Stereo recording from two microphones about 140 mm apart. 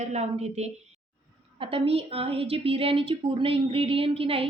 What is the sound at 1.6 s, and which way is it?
A woman's voice, 40° right (ahead or behind).